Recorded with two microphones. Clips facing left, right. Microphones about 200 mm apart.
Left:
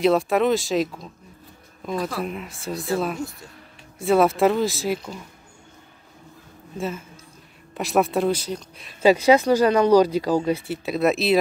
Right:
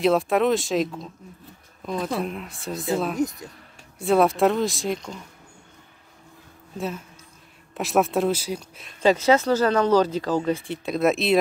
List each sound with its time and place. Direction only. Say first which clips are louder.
0.0 s speech: left 1 dB; centre (ahead or behind)
3.2 s speech: right 7 dB; 20° right (ahead or behind)
4.0 s speech: left 1 dB; centre (ahead or behind)
6.8 s speech: left 1 dB; centre (ahead or behind)
9.0 s speech: left 3 dB; 10° left (ahead or behind)